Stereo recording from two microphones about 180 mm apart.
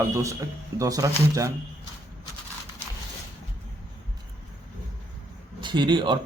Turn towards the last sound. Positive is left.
turn(degrees=-25)  # may be behind; listen again after turning